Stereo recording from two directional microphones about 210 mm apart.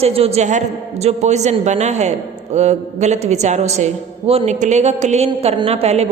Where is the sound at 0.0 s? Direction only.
30° right (ahead or behind).